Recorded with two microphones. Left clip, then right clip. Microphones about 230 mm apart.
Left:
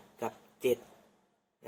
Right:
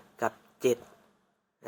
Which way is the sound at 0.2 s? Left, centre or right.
Right.